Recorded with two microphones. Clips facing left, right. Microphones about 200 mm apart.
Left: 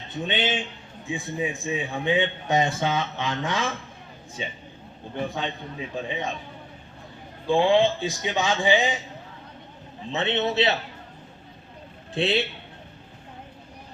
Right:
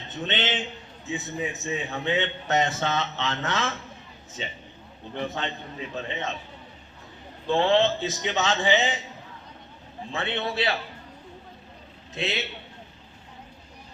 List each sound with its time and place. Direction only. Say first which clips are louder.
0.1 s a man's voice: left 2 dB; 10° left (ahead or behind)
5.1 s a man's voice: left 1 dB; 10° left (ahead or behind)
7.4 s a man's voice: left 2 dB; 10° left (ahead or behind)
10.1 s a man's voice: left 5 dB; 20° left (ahead or behind)
12.1 s a man's voice: left 7 dB; 30° left (ahead or behind)